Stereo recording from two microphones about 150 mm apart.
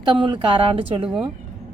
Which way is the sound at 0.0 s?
30° right (ahead or behind).